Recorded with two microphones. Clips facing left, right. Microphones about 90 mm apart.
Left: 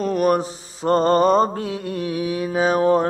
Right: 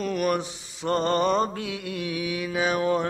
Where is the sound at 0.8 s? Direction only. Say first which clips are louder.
Left 7 dB; 40° left (ahead or behind).